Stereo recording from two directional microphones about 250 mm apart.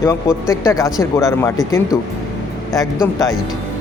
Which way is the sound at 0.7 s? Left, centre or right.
Centre.